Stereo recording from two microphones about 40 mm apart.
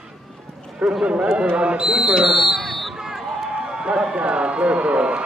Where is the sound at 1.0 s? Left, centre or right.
Right.